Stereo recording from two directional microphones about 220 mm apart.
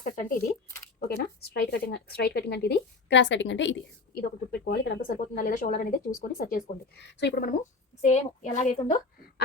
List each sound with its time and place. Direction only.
0.0 s speech: 40° left (ahead or behind)
8.0 s a woman's voice: 30° left (ahead or behind)